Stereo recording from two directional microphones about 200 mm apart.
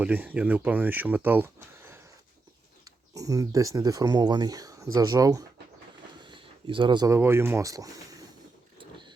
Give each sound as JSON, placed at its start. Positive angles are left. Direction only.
{"t": 0.0, "sound": "speech", "side_deg": -10}
{"t": 3.2, "sound": "speech", "side_deg": -15}